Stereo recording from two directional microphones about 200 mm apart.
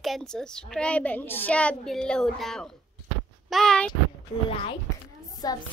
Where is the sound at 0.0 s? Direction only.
Centre (ahead or behind).